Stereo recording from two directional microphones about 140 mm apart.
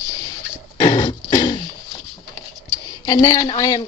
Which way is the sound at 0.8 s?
30° left (ahead or behind).